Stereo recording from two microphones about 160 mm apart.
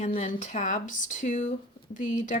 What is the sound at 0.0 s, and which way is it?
Speech, 45° left (ahead or behind).